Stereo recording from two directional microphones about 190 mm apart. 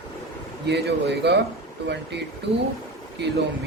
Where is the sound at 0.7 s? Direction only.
60° right (ahead or behind).